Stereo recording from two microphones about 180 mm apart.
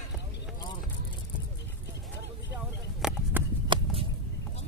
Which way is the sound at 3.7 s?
25° right (ahead or behind).